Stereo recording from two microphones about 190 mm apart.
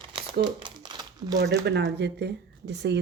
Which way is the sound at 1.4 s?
60° right (ahead or behind).